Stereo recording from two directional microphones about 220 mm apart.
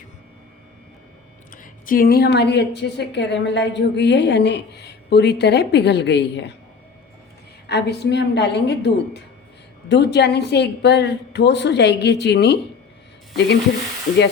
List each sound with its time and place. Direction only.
1.5 s a woman's voice: 40° left (ahead or behind)
7.7 s a woman's voice: 50° left (ahead or behind)